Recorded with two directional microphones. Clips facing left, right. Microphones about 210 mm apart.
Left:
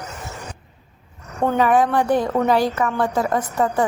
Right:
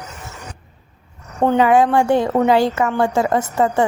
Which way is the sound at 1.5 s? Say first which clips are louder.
Right 3 dB; 25° right (ahead or behind).